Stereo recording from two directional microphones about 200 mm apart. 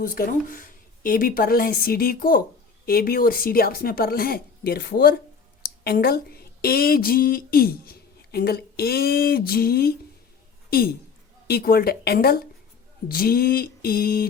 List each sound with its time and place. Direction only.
0.0 s a woman's voice: 45° left (ahead or behind)